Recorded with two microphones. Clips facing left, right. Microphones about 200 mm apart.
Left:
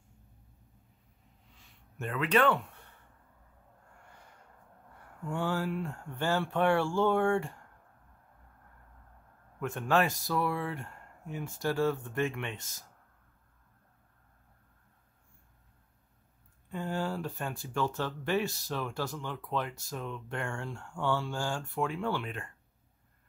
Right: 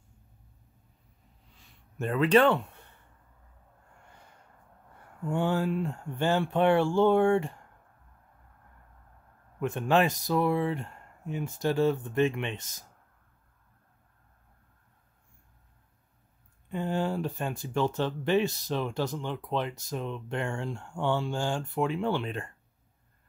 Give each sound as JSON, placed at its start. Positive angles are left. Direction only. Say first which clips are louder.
{"t": 2.0, "sound": "speech", "louder": "right 6 dB", "side_deg": -35}
{"t": 5.3, "sound": "speech", "louder": "right 5 dB", "side_deg": -20}
{"t": 9.6, "sound": "speech", "louder": "right 3 dB", "side_deg": -20}
{"t": 16.6, "sound": "speech", "louder": "right 4 dB", "side_deg": -20}